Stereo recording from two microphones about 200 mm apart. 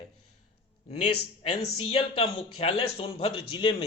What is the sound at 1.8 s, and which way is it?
A man's voice, 30° left (ahead or behind).